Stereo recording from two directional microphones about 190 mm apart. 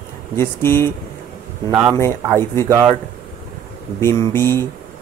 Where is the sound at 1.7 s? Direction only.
10° right (ahead or behind).